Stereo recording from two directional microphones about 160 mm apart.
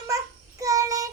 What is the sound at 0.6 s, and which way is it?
Child singing, 20° right (ahead or behind).